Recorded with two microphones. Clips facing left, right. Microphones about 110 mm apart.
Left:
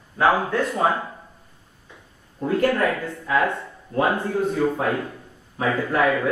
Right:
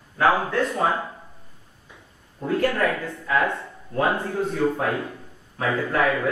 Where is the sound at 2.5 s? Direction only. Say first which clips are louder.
Left 2 dB; 20° left (ahead or behind).